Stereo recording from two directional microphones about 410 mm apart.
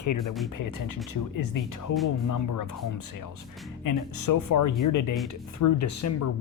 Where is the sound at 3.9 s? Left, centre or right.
Left.